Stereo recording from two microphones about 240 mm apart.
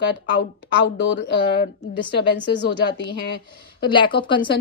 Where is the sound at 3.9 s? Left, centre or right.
Centre.